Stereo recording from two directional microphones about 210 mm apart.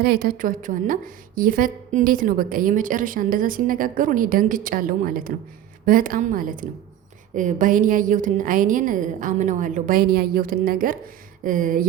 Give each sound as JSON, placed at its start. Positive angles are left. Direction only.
{"t": 0.0, "sound": "a woman's voice", "side_deg": -45}